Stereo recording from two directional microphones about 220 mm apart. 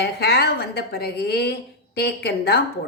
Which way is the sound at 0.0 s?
45° left (ahead or behind).